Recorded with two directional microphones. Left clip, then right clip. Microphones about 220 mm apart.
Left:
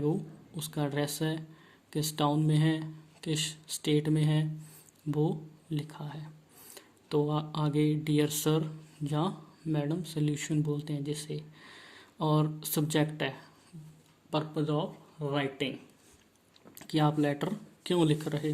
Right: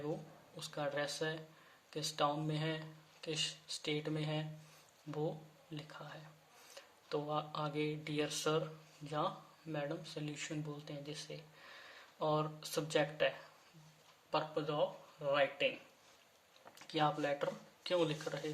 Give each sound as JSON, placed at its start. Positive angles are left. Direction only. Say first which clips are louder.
{"t": 0.5, "sound": "speech", "louder": "left 6 dB", "side_deg": 40}
{"t": 5.7, "sound": "speech", "louder": "left 9 dB", "side_deg": 40}
{"t": 16.7, "sound": "speech", "louder": "left 6 dB", "side_deg": 40}